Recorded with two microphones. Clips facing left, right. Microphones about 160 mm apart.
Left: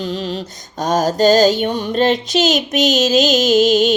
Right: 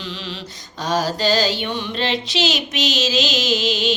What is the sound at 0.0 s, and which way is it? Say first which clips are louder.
Mantra: left 9 dB; 45° left (ahead or behind).